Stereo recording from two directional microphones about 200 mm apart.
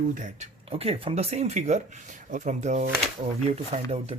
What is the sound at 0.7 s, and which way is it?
Speech, 30° right (ahead or behind).